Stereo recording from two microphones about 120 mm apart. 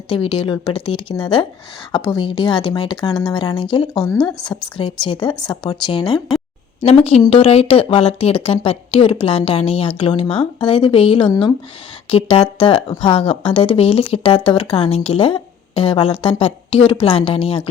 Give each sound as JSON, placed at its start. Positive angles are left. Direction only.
{"t": 0.1, "sound": "speech", "side_deg": 45}
{"t": 6.8, "sound": "speech", "side_deg": 55}
{"t": 11.3, "sound": "speech", "side_deg": 40}
{"t": 12.1, "sound": "speech", "side_deg": 50}